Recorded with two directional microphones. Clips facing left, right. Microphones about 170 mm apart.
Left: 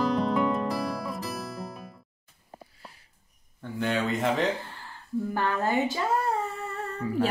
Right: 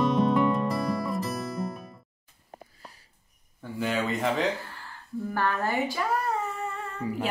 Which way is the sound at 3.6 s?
5° right (ahead or behind).